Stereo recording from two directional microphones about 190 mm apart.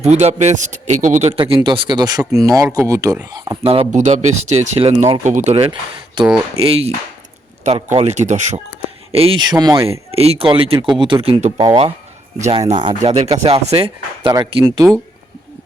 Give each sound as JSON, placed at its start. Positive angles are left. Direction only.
{"t": 0.0, "sound": "speech", "side_deg": -35}
{"t": 7.9, "sound": "speech", "side_deg": -35}
{"t": 9.1, "sound": "speech", "side_deg": -30}
{"t": 10.2, "sound": "speech", "side_deg": -30}